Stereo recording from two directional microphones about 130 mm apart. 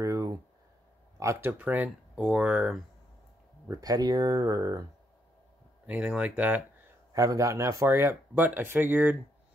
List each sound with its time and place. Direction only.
0.0 s a sound: 25° right (ahead or behind)
1.2 s speech: 20° right (ahead or behind)
3.6 s speech: 25° right (ahead or behind)
5.9 s speech: 5° right (ahead or behind)
7.2 s speech: 25° right (ahead or behind)